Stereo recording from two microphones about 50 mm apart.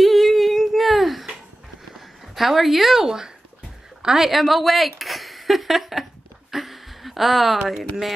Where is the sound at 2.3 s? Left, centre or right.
Centre.